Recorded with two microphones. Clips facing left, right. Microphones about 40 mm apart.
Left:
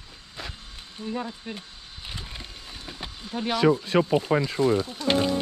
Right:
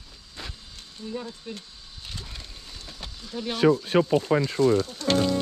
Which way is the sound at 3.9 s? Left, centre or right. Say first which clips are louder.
Right 1 dB; left.